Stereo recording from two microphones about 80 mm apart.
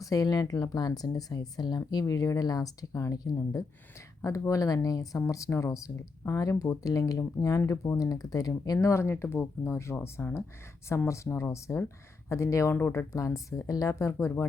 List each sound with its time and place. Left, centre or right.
0.0 s speech: left
12.7 s speech: left
13.1 s speech: left